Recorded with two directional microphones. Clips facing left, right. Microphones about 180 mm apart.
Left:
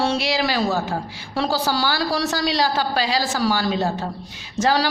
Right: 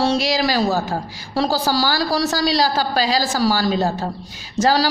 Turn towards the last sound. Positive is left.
turn(degrees=-35)  # may be behind; listen again after turning